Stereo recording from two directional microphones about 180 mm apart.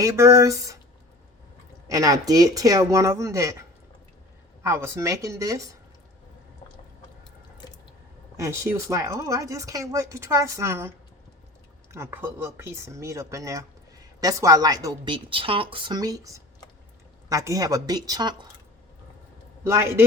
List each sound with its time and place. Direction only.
0.0 s speech: 15° right (ahead or behind)
1.9 s speech: 20° right (ahead or behind)
4.6 s speech: 15° right (ahead or behind)
8.4 s speech: 15° right (ahead or behind)
11.9 s speech: 15° right (ahead or behind)
19.6 s speech: 15° right (ahead or behind)